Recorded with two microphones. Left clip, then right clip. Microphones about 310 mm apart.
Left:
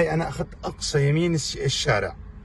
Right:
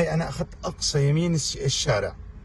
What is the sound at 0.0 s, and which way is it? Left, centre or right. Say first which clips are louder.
A man's voice: left 2 dB; centre.